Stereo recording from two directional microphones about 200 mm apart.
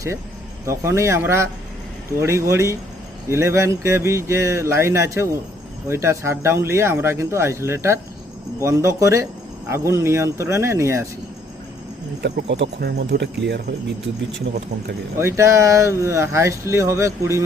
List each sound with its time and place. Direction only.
0.6 s speech: 15° right (ahead or behind)
12.2 s speech: 55° right (ahead or behind)
15.2 s speech: 15° right (ahead or behind)